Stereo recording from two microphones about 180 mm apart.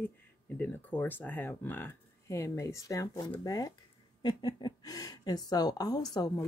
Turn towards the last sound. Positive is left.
turn(degrees=20)  # may be behind; listen again after turning